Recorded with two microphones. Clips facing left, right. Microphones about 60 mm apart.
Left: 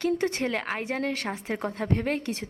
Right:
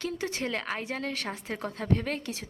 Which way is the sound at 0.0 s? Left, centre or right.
Left.